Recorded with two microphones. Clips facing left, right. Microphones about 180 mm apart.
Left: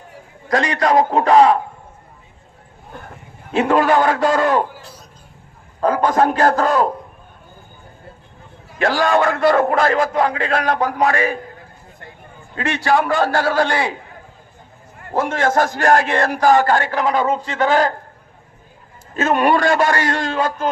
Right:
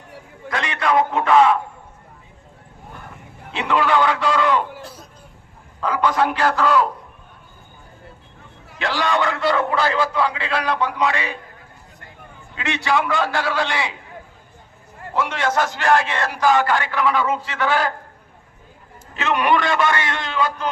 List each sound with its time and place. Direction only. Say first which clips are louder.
0.4 s a man's voice: left 5 dB; 40° left (ahead or behind)
3.5 s a man's voice: left 5 dB; 45° left (ahead or behind)
5.8 s a man's voice: left 4 dB; 45° left (ahead or behind)
8.8 s a man's voice: left 5 dB; 45° left (ahead or behind)
12.5 s a man's voice: left 4 dB; 45° left (ahead or behind)
15.1 s a man's voice: left 4 dB; 45° left (ahead or behind)
19.1 s a man's voice: left 3 dB; 45° left (ahead or behind)